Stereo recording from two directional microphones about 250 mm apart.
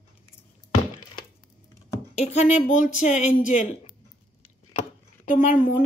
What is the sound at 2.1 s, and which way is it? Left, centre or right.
Speech, left.